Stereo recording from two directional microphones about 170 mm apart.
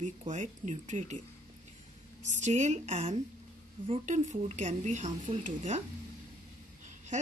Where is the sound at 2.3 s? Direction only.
45° right (ahead or behind).